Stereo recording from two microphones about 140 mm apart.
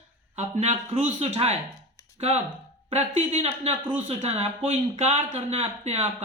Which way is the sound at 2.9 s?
50° right (ahead or behind).